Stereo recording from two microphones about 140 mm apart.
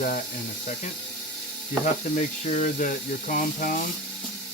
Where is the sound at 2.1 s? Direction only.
60° left (ahead or behind); by 3.7 s 85° left.